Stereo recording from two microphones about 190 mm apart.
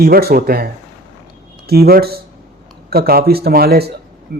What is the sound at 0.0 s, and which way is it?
A man's voice, 55° right (ahead or behind).